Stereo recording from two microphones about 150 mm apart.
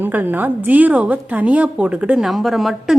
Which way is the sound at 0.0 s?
10° right (ahead or behind).